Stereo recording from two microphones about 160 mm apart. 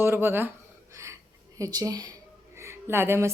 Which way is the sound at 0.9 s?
20° right (ahead or behind).